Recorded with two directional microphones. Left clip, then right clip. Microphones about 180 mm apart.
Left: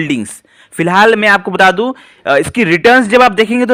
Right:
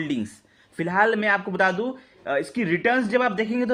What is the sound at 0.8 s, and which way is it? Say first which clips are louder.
A man's voice: left 13 dB; 40° left (ahead or behind).